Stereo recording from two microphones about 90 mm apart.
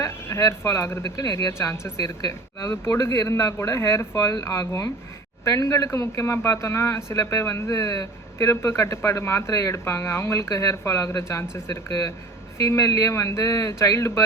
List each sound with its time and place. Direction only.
0.0 s speech: 30° left (ahead or behind)
2.0 s speech: 45° left (ahead or behind)
2.6 s speech: 30° left (ahead or behind)
10.5 s speech: 40° left (ahead or behind)